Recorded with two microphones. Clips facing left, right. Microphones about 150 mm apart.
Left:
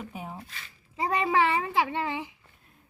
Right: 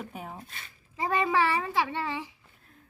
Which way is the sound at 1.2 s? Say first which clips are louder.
Left 2 dB; 20° left (ahead or behind).